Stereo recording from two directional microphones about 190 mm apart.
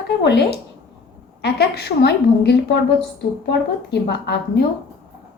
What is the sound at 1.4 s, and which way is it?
A woman's voice, 60° left (ahead or behind).